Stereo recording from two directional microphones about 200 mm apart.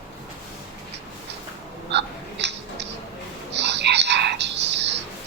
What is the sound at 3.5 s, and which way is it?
Whispering, 60° right (ahead or behind).